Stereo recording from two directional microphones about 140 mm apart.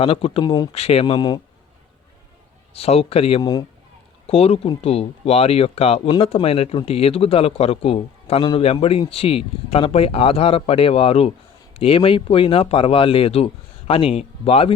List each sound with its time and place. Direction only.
0.0 s speech: 40° left (ahead or behind)
0.7 s speech: 45° left (ahead or behind)
2.7 s speech: 45° left (ahead or behind)
3.4 s a man's voice: 25° left (ahead or behind)
4.3 s speech: 45° left (ahead or behind)